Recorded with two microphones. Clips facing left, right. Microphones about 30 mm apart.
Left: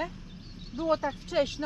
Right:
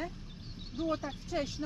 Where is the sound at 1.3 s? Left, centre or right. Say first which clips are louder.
Left 7 dB; left.